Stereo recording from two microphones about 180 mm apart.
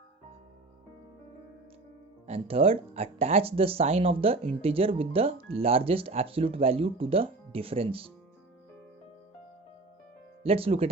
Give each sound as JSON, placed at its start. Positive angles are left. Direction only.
{"t": 2.2, "sound": "speech", "side_deg": -35}
{"t": 10.4, "sound": "speech", "side_deg": -35}